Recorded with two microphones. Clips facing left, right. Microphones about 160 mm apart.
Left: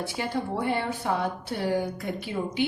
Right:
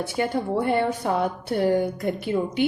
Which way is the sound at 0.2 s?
50° right (ahead or behind).